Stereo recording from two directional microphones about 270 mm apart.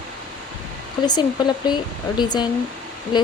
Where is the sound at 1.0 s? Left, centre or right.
Centre.